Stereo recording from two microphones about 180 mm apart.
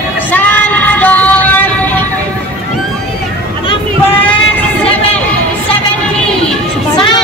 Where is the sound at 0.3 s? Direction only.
10° left (ahead or behind).